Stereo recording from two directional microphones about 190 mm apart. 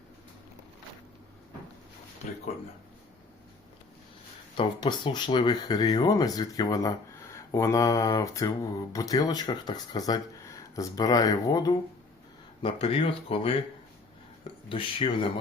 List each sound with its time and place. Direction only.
2.2 s speech: 40° left (ahead or behind)
4.5 s speech: 25° left (ahead or behind)
14.7 s speech: 25° left (ahead or behind)